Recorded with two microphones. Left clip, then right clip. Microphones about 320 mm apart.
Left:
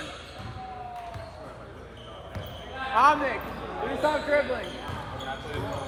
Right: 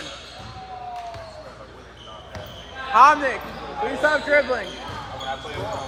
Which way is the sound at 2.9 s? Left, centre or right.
Right.